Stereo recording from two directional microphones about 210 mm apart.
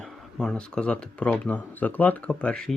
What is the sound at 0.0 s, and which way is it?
Speech, 5° left (ahead or behind).